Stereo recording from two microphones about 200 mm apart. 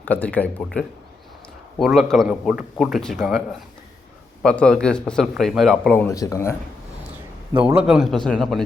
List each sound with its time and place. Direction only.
0.0 s a man's voice: 10° left (ahead or behind)
4.4 s a man's voice: 5° left (ahead or behind)
7.5 s a man's voice: 5° right (ahead or behind)